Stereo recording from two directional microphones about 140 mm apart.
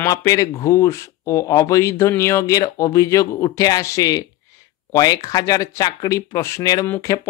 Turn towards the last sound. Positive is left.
turn(degrees=20)  # may be behind; listen again after turning